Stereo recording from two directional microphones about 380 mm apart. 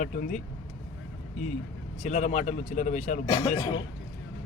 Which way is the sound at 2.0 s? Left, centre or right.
Centre.